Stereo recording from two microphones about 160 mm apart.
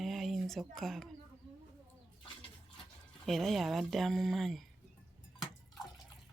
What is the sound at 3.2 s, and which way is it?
Speech, centre (ahead or behind).